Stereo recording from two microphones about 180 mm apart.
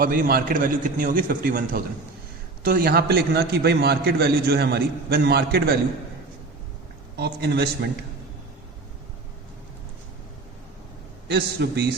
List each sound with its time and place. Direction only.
0.0 s a man's voice: 50° right (ahead or behind)
7.2 s a man's voice: 65° right (ahead or behind)
11.3 s a man's voice: 65° right (ahead or behind)